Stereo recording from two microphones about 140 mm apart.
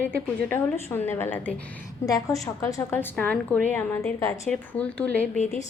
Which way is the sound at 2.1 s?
25° left (ahead or behind).